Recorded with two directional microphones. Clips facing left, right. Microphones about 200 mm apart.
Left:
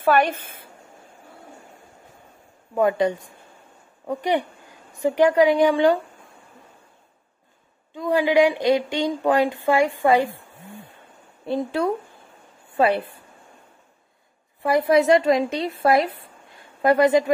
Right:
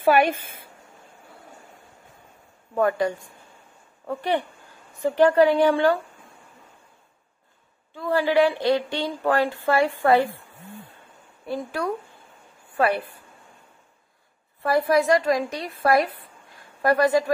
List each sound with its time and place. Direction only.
0.0 s a woman's voice: 10° right (ahead or behind)
2.7 s a woman's voice: 20° left (ahead or behind)
7.9 s speech: 15° left (ahead or behind)
11.4 s a woman's voice: 25° left (ahead or behind)
14.6 s a woman's voice: 20° left (ahead or behind)